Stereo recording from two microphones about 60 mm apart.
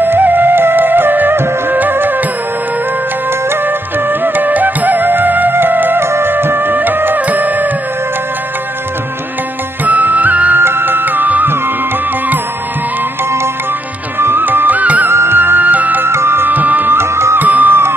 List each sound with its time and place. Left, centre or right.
0.0 s music: right
4.2 s music: right
9.8 s music: right
10.6 s music: right
14.2 s music: right
15.0 s music: right
16.1 s music: right
17.4 s music: right